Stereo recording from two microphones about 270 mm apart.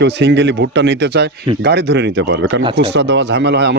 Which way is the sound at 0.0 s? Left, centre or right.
Right.